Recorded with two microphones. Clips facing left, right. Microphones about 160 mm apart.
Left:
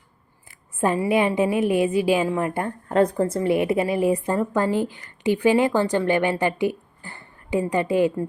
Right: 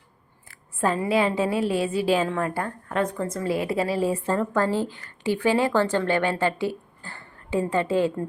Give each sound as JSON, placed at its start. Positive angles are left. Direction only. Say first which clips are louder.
{"t": 0.8, "sound": "a woman's voice", "louder": "left 2 dB", "side_deg": 15}
{"t": 3.0, "sound": "a woman's voice", "louder": "left 6 dB", "side_deg": 35}